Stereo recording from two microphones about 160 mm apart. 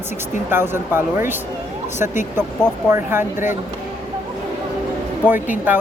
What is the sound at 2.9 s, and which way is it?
Speech, 15° right (ahead or behind).